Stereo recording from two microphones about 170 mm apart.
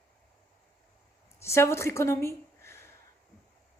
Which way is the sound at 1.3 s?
15° left (ahead or behind).